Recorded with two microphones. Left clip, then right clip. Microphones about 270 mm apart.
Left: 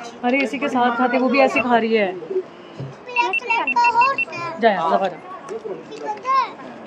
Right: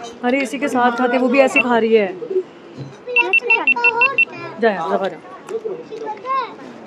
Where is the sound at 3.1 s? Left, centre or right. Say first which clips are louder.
Right 4 dB; left.